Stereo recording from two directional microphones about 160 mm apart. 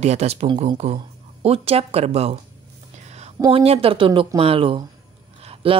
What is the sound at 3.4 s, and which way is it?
Speech, 35° right (ahead or behind).